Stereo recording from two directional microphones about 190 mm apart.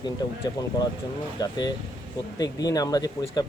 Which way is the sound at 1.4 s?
20° left (ahead or behind).